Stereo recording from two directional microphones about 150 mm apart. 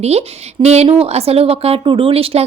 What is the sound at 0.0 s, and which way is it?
A woman's voice, 45° right (ahead or behind).